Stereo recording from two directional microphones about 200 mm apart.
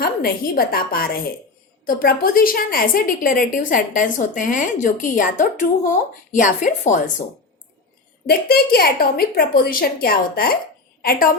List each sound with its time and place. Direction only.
0.0 s a woman's voice: 50° left (ahead or behind)
8.3 s a woman's voice: 50° left (ahead or behind)